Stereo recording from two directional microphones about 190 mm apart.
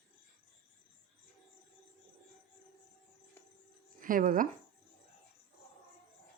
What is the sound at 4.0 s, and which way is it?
Speech, 45° right (ahead or behind).